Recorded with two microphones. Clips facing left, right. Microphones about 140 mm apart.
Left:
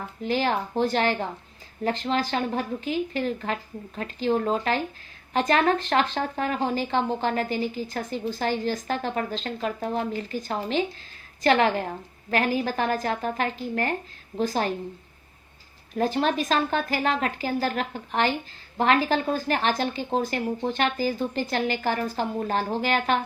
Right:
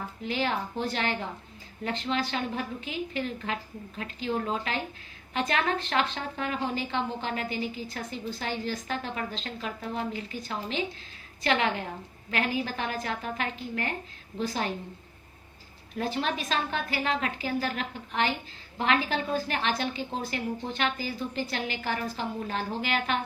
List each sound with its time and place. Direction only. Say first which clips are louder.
0.2 s a woman's voice: left 5 dB; 40° left (ahead or behind)
16.0 s a woman's voice: left 6 dB; 40° left (ahead or behind)